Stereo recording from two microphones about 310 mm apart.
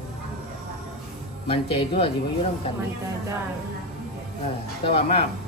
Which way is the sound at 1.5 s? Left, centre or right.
Centre.